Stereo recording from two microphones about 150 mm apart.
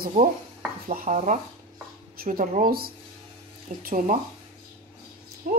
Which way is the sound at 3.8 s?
60° right (ahead or behind).